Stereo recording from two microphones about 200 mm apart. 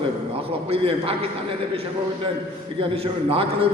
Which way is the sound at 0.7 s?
30° right (ahead or behind).